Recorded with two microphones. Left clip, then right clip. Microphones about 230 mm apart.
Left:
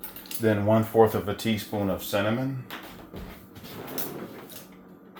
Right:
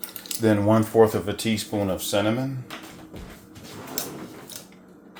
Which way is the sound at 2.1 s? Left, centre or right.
Right.